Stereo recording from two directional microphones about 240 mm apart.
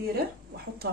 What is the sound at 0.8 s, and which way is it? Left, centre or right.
Speech, right.